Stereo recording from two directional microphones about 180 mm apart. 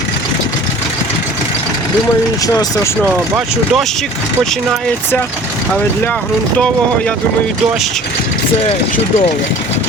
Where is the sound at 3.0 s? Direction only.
5° right (ahead or behind).